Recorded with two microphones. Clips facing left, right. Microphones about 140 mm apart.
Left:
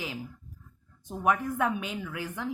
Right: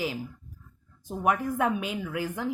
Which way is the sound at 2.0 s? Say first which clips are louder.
Right 4 dB; 35° right (ahead or behind).